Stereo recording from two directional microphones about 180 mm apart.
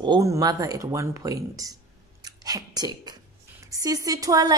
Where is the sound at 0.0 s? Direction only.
20° right (ahead or behind).